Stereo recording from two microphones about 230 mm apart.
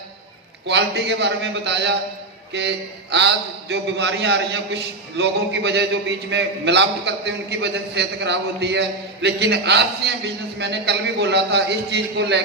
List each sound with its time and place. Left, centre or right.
0.7 s a man's voice: right